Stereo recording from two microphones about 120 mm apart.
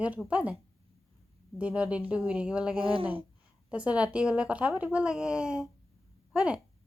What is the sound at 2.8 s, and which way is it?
Speech, 50° right (ahead or behind).